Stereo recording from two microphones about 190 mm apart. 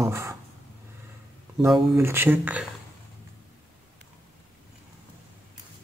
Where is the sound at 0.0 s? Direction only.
15° right (ahead or behind).